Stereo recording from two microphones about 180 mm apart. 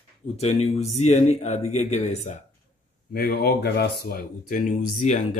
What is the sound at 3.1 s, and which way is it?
Speech, 55° left (ahead or behind).